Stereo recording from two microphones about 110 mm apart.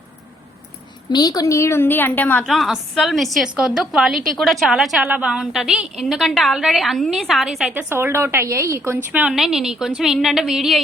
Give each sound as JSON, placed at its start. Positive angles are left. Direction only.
{"t": 1.1, "sound": "a woman's voice", "side_deg": 35}
{"t": 2.5, "sound": "a woman's voice", "side_deg": 0}
{"t": 7.7, "sound": "a woman's voice", "side_deg": -20}
{"t": 9.3, "sound": "a woman's voice", "side_deg": -5}